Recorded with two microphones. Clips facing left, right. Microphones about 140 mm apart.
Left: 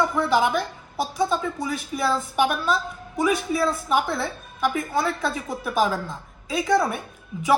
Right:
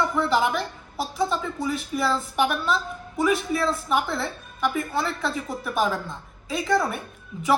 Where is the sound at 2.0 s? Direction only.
Centre (ahead or behind).